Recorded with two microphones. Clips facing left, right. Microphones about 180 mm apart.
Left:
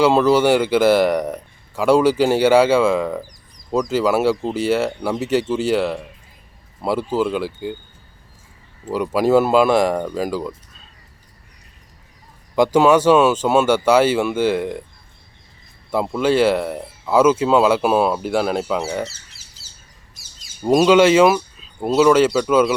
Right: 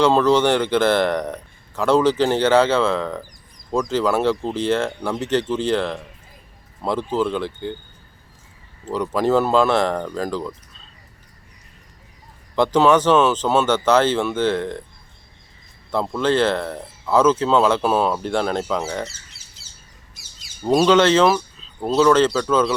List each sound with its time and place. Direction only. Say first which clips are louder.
0.0 s a man's voice: left 2 dB; 10° left (ahead or behind)
8.8 s a man's voice: left 2 dB; 10° left (ahead or behind)
12.5 s a man's voice: left 2 dB; 10° left (ahead or behind)
15.9 s a man's voice: left 2 dB; 10° left (ahead or behind)
20.6 s a man's voice: left 2 dB; 10° left (ahead or behind)